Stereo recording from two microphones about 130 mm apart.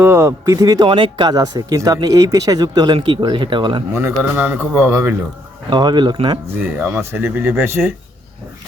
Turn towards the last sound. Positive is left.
turn(degrees=-15)  # may be behind; listen again after turning